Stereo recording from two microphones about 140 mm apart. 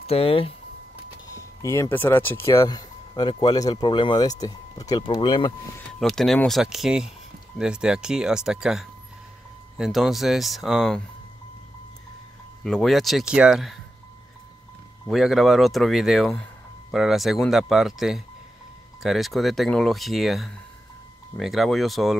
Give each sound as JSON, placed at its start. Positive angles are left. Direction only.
{"t": 0.0, "sound": "speech", "side_deg": 45}
{"t": 1.2, "sound": "speech", "side_deg": 25}
{"t": 5.9, "sound": "speech", "side_deg": 0}
{"t": 12.6, "sound": "speech", "side_deg": 5}
{"t": 15.0, "sound": "speech", "side_deg": 0}